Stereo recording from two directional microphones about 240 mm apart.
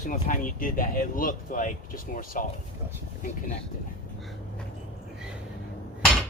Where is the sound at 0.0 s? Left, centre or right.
Left.